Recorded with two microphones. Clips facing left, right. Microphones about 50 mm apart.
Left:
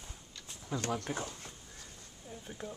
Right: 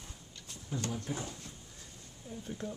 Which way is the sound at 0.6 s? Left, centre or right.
Left.